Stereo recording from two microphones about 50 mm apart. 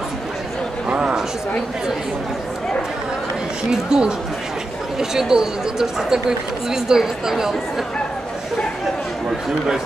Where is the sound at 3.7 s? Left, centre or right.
Centre.